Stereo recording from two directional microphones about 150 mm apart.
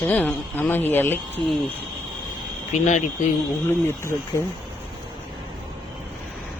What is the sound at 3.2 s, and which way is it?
Speech, 55° left (ahead or behind).